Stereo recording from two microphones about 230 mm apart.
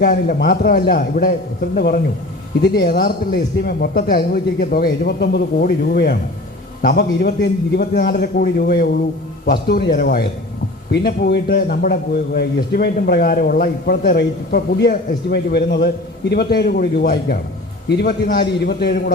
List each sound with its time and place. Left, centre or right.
0.0 s a man's voice: left